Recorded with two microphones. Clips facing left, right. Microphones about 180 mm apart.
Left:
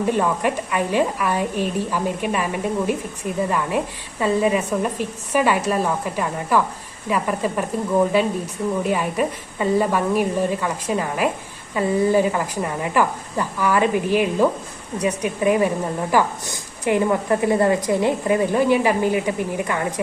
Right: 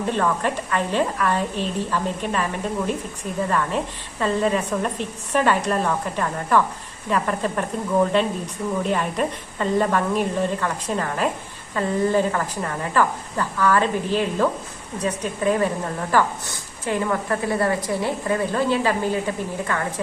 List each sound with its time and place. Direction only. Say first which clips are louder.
0.1 s a woman's voice: even; 10° left (ahead or behind)